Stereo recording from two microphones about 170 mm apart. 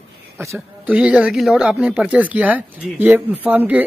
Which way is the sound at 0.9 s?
5° right (ahead or behind).